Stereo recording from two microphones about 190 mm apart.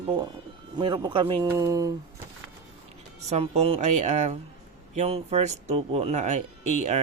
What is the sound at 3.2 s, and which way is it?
Speech, 35° right (ahead or behind).